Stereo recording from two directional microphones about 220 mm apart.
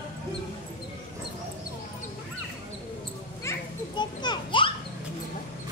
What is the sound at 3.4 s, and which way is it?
Children playing, 10° left (ahead or behind).